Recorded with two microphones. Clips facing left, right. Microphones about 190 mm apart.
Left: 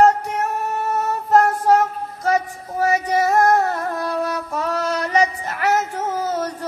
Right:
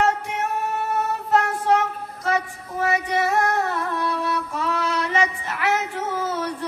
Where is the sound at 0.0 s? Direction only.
40° left (ahead or behind).